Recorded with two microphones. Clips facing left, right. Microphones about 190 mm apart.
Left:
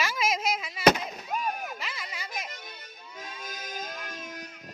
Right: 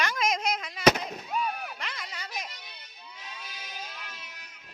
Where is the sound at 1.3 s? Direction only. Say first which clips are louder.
Even; 45° left (ahead or behind).